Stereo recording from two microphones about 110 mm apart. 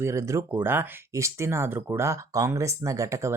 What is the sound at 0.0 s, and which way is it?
Speech, 25° right (ahead or behind).